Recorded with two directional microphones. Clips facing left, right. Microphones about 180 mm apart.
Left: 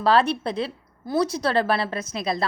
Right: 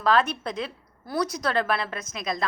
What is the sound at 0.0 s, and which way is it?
A woman's voice, 30° left (ahead or behind).